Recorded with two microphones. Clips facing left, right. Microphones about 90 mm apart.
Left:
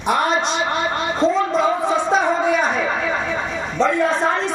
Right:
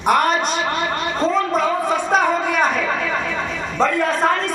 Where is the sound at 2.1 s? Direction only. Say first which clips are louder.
Right 1 dB; 55° right (ahead or behind).